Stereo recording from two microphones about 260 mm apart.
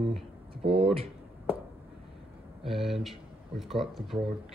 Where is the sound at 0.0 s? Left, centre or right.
Right.